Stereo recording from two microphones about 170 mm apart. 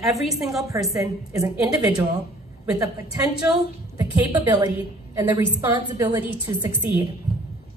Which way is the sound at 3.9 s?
20° right (ahead or behind).